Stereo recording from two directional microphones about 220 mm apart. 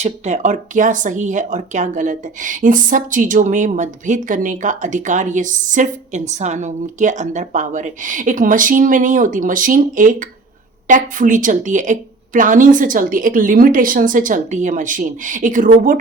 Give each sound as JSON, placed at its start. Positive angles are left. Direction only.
{"t": 0.0, "sound": "speech", "side_deg": -30}